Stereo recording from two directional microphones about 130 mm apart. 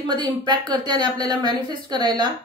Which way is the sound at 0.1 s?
35° right (ahead or behind).